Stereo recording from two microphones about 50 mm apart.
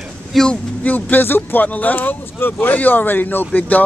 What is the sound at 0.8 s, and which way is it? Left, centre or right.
Speech, left.